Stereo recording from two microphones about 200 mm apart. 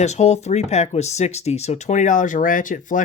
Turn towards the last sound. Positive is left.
turn(degrees=40)  # may be behind; listen again after turning